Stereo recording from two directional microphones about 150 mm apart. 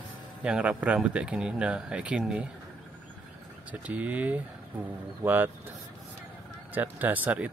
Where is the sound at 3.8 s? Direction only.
10° right (ahead or behind).